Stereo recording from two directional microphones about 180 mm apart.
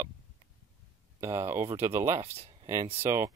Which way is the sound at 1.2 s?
15° right (ahead or behind).